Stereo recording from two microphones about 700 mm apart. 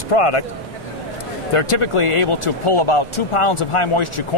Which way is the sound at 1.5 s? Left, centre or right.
Left.